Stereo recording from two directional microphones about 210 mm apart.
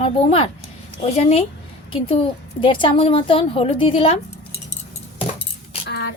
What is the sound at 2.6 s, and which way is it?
A woman's voice, 25° left (ahead or behind).